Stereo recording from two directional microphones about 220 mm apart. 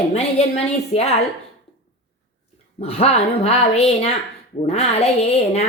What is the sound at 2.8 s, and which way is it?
Speech, 30° left (ahead or behind).